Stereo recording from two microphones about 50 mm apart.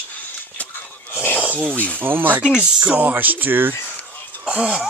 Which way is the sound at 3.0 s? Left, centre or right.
Right.